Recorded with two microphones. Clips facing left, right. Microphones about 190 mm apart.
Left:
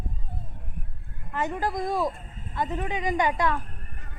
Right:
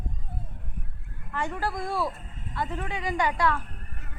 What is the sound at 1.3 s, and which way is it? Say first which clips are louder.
Speech: left 3 dB; 20° left (ahead or behind).